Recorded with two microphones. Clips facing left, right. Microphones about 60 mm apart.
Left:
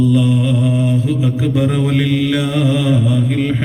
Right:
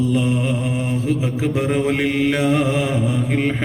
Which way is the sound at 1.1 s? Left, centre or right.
Right.